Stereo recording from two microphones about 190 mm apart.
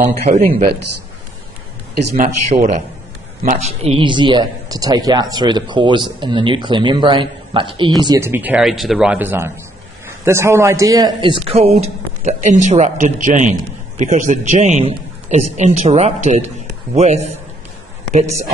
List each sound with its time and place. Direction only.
0.3 s speech: 50° right (ahead or behind)
2.1 s a man's voice: 40° right (ahead or behind); by 8.3 s 20° right (ahead or behind)
8.3 s a man's voice: 10° right (ahead or behind); by 17.3 s 35° right (ahead or behind)